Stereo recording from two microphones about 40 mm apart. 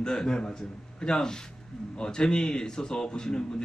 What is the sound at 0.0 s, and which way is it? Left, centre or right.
A man's voice, centre.